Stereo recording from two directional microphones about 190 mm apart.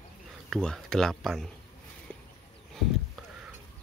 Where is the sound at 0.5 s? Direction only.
5° left (ahead or behind).